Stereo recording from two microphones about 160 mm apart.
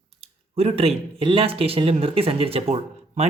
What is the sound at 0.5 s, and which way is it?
Speech, 40° right (ahead or behind).